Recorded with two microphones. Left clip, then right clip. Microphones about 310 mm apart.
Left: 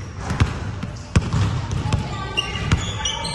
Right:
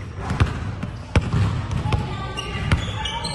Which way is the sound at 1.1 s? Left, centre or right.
Right.